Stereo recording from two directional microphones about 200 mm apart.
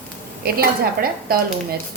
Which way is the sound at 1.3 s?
45° right (ahead or behind).